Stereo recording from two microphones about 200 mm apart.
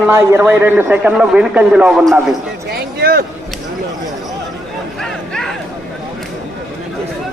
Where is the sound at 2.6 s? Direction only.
50° right (ahead or behind).